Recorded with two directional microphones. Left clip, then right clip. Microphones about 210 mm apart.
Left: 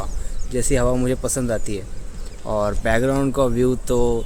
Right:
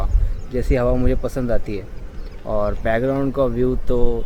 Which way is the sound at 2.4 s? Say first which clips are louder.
Even; 25° left (ahead or behind).